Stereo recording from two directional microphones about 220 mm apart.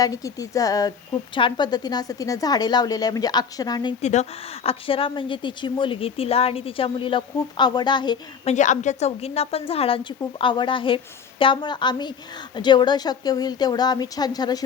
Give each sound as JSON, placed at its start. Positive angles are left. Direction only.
{"t": 0.0, "sound": "speech", "side_deg": 15}
{"t": 4.0, "sound": "a woman's voice", "side_deg": 30}
{"t": 8.5, "sound": "a woman's voice", "side_deg": 35}